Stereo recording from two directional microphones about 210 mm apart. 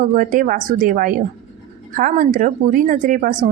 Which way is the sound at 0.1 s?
40° right (ahead or behind).